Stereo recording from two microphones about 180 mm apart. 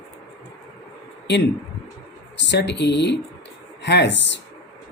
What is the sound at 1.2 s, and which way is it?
Speech, 75° left (ahead or behind).